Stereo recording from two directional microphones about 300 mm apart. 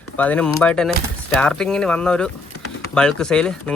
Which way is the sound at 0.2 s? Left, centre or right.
Centre.